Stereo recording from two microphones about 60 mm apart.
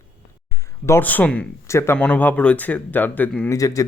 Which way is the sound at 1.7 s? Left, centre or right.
Left.